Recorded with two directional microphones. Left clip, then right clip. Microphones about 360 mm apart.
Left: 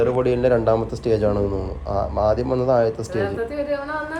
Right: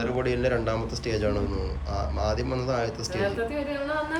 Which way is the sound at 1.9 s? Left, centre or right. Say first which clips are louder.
Left 10 dB; centre.